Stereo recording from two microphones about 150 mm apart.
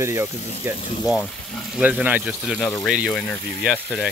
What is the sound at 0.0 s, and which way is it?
Speech, 15° right (ahead or behind).